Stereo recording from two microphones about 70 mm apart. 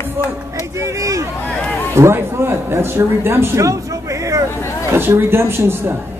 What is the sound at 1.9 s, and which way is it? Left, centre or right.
Speech, right.